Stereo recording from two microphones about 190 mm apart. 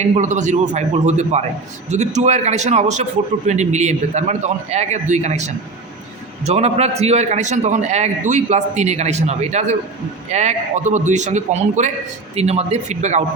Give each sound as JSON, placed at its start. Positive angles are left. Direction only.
{"t": 0.0, "sound": "a man's voice", "side_deg": -40}